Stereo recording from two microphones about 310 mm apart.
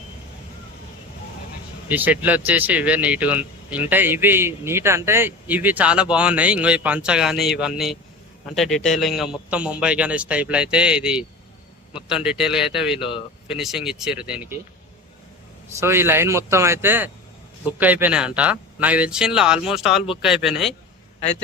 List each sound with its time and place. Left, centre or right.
1.9 s a man's voice: centre
13.0 s speech: centre
13.5 s a man's voice: centre
15.8 s a man's voice: centre